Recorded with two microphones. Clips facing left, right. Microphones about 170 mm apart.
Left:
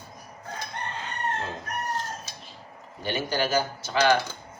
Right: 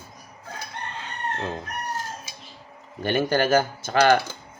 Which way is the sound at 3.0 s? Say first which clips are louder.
Right 6 dB; 50° right (ahead or behind).